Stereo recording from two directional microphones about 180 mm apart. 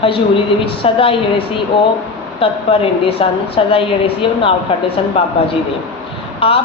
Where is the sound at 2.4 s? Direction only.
30° left (ahead or behind).